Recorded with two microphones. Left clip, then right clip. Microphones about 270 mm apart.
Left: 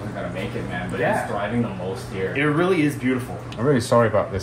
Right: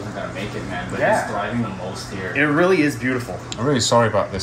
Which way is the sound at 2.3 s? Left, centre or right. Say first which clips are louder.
Right 4 dB; centre.